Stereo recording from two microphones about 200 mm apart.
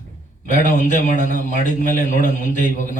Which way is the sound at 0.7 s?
40° left (ahead or behind).